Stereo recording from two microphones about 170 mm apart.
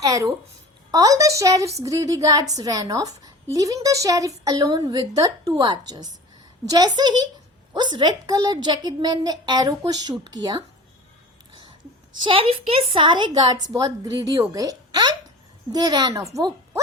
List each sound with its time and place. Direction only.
0.0 s a woman's voice: 20° right (ahead or behind)
12.2 s a woman's voice: 30° right (ahead or behind)